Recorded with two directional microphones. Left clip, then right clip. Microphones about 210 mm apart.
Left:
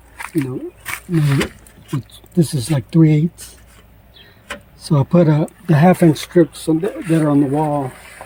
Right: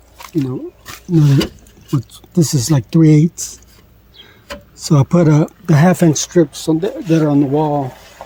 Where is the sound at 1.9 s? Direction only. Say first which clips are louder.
Right 6 dB; 30° right (ahead or behind).